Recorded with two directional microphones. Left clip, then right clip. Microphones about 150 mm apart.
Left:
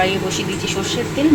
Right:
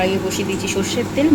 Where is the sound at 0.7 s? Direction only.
20° right (ahead or behind).